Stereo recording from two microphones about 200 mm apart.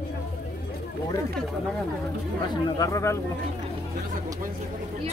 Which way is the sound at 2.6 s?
15° left (ahead or behind).